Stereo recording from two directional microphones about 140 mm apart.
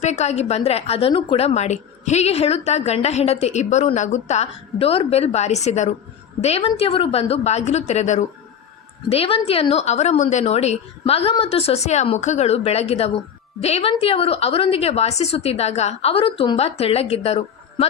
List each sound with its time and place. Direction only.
0.0 s a woman's voice: 55° left (ahead or behind)
9.0 s a woman's voice: 45° left (ahead or behind)